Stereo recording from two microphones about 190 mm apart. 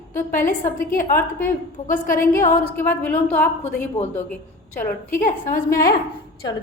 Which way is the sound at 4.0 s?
35° left (ahead or behind).